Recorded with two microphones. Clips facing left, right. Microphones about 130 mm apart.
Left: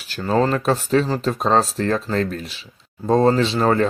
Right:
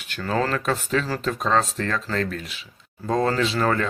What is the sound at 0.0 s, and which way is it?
Speech, 30° left (ahead or behind).